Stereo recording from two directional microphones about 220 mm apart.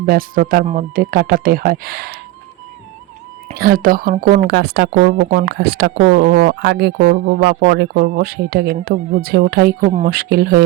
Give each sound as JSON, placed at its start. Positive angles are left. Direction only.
{"t": 0.0, "sound": "speech", "side_deg": -40}
{"t": 3.5, "sound": "speech", "side_deg": -40}